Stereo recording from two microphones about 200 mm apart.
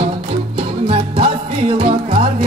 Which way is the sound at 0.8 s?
30° right (ahead or behind).